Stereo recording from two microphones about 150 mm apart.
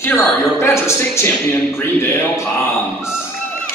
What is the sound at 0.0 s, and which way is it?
A woman's voice, 15° left (ahead or behind).